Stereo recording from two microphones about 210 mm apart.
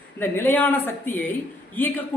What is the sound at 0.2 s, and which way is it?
A man's voice, 10° left (ahead or behind).